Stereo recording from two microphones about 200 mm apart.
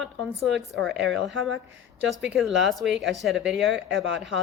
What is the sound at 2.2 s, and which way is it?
Speech, centre (ahead or behind).